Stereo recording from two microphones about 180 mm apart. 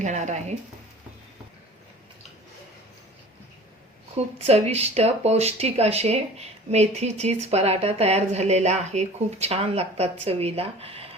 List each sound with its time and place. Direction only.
0.0 s speech: 40° right (ahead or behind)
4.4 s speech: 35° right (ahead or behind)